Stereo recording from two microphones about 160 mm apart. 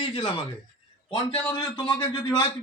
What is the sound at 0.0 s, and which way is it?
Speech, 30° left (ahead or behind).